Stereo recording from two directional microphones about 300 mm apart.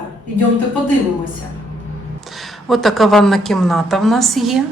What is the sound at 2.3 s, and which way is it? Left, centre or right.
A woman's voice, centre.